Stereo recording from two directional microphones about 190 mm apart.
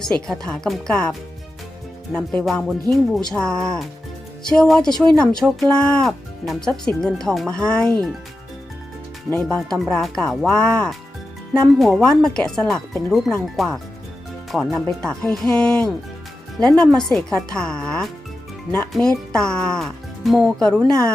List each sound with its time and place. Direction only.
0.0 s speech: 5° left (ahead or behind)
2.1 s speech: 5° left (ahead or behind)
9.3 s speech: 5° left (ahead or behind)
20.8 s a woman's voice: 20° right (ahead or behind)